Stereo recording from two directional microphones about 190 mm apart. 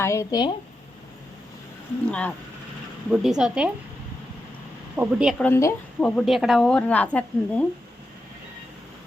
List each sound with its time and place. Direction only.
0.0 s speech: 15° left (ahead or behind)
2.0 s speech: 5° left (ahead or behind)
4.9 s speech: 5° right (ahead or behind)
5.5 s speech: 15° left (ahead or behind)
6.1 s speech: centre (ahead or behind)